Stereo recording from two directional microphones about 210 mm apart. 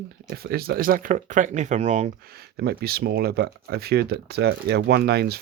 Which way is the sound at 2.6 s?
50° right (ahead or behind).